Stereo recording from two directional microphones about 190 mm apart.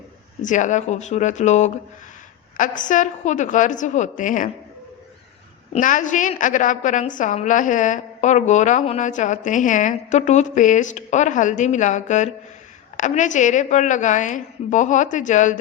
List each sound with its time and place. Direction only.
0.4 s a woman's voice: 40° left (ahead or behind)
5.7 s a woman's voice: 45° left (ahead or behind)